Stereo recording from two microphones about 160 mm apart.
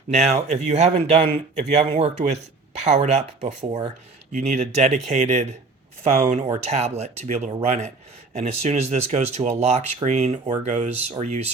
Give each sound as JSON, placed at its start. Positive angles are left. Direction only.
{"t": 0.1, "sound": "speech", "side_deg": -45}